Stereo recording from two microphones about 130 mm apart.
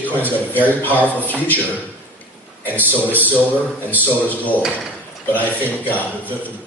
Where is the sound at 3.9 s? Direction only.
10° left (ahead or behind).